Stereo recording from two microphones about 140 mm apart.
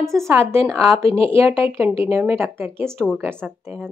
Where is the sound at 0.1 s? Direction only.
20° right (ahead or behind).